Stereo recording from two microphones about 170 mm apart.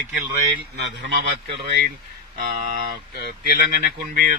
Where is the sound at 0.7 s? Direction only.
85° right.